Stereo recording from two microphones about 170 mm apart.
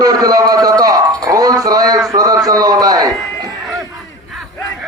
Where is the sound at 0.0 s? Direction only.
20° right (ahead or behind).